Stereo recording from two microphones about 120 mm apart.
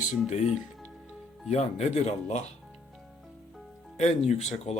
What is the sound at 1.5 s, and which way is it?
Speech, 70° left (ahead or behind).